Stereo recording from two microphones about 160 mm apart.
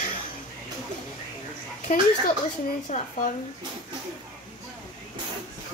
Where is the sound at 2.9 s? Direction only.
50° left (ahead or behind).